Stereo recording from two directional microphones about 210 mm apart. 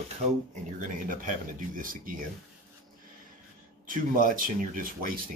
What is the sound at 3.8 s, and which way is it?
Speech, 40° right (ahead or behind).